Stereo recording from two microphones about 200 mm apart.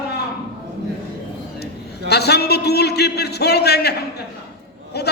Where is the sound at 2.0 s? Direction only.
55° left (ahead or behind).